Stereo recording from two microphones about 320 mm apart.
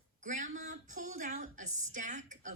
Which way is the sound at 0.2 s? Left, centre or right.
Right.